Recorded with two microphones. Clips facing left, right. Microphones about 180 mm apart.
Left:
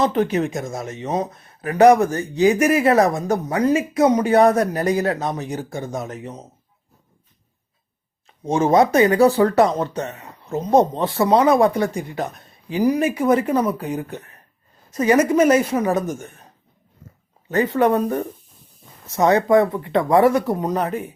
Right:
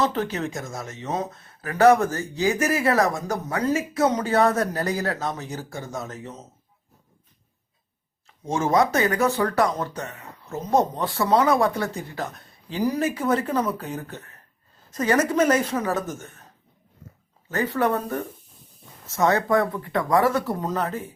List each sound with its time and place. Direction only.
0.0 s speech: 15° left (ahead or behind)
8.4 s speech: 20° left (ahead or behind)
9.1 s speech: 30° left (ahead or behind); by 16.3 s 15° left (ahead or behind)
17.5 s speech: 20° left (ahead or behind)